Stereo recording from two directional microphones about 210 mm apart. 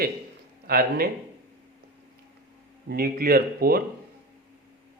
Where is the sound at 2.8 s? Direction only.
45° right (ahead or behind).